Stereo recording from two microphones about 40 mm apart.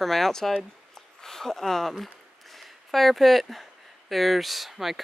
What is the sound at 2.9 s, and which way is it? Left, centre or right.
Speech, centre.